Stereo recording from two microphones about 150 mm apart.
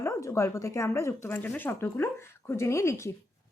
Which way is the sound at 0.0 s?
20° left (ahead or behind).